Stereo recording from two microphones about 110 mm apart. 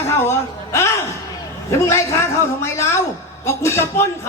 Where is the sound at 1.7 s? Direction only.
25° left (ahead or behind).